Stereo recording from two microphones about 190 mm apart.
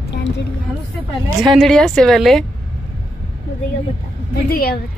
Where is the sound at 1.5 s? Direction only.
Centre (ahead or behind).